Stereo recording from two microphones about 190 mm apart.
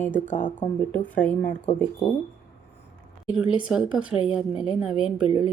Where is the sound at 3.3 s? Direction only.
5° right (ahead or behind).